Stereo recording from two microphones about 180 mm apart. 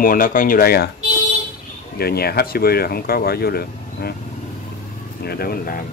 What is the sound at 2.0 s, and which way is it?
Speech, 60° left (ahead or behind).